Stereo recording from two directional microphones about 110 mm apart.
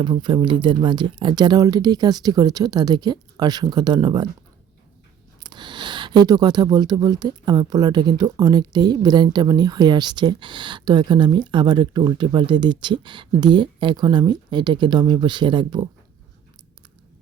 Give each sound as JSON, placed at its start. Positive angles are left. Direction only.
{"t": 0.0, "sound": "speech", "side_deg": -45}
{"t": 5.4, "sound": "speech", "side_deg": -40}